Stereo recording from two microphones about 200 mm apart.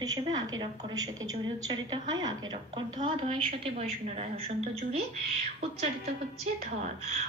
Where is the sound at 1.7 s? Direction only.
20° right (ahead or behind).